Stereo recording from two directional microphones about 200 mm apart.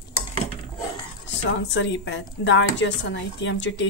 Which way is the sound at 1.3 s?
65° left (ahead or behind).